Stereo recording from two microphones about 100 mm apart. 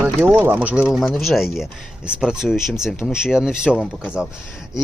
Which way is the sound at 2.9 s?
20° left (ahead or behind).